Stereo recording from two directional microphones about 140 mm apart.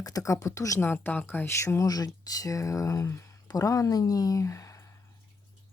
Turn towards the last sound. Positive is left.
turn(degrees=20)  # may be behind; listen again after turning